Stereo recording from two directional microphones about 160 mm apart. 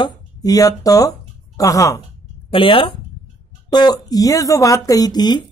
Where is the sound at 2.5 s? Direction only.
35° left (ahead or behind).